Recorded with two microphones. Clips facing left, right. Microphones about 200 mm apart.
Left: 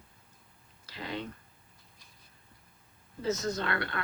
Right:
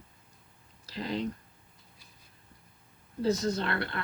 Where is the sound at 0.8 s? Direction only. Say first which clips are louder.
Right 5 dB; 35° right (ahead or behind).